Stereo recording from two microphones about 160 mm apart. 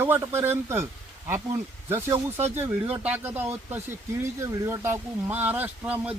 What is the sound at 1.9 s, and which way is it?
Speech, 15° right (ahead or behind).